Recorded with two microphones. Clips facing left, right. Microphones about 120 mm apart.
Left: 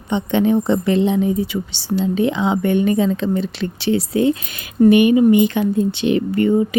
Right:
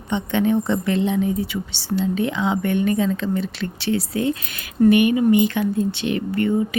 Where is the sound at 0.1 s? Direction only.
20° left (ahead or behind).